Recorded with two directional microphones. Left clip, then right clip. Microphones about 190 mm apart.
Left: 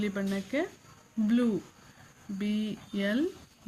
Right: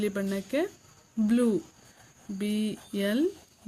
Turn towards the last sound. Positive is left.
turn(degrees=-50)  # may be behind; listen again after turning